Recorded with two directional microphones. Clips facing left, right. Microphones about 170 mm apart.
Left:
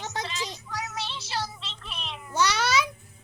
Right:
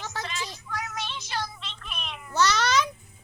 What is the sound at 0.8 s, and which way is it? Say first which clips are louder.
Music: even; 30° left (ahead or behind).